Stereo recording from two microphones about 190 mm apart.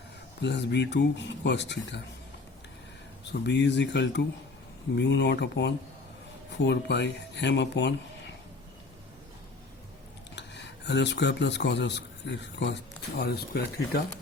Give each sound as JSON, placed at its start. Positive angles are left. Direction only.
{"t": 0.4, "sound": "speech", "side_deg": 65}
{"t": 3.4, "sound": "speech", "side_deg": 65}
{"t": 10.3, "sound": "speech", "side_deg": 65}